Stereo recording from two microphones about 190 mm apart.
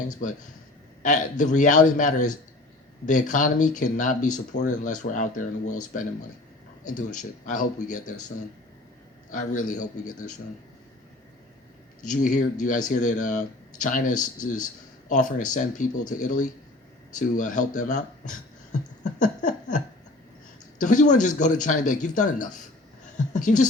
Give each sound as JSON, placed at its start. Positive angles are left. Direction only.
{"t": 0.1, "sound": "speech", "side_deg": 40}
{"t": 9.3, "sound": "speech", "side_deg": 40}
{"t": 12.0, "sound": "speech", "side_deg": 40}